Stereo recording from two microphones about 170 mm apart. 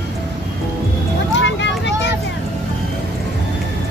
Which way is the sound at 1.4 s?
90° left.